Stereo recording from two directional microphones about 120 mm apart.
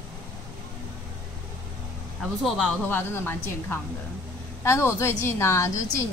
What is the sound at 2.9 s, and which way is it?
A woman's voice, 15° left (ahead or behind).